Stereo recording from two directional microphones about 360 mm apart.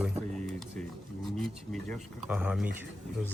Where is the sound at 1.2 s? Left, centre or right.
Centre.